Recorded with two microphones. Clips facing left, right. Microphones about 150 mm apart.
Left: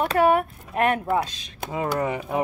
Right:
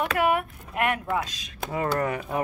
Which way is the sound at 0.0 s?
35° left (ahead or behind).